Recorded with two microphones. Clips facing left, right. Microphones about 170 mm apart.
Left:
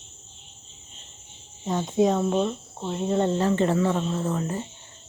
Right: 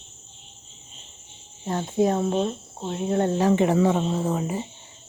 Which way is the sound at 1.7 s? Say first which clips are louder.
Even; 5° right (ahead or behind).